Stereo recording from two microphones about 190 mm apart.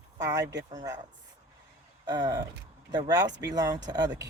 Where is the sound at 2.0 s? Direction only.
20° right (ahead or behind).